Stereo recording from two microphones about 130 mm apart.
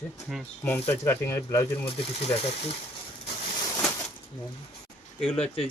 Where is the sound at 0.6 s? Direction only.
15° left (ahead or behind).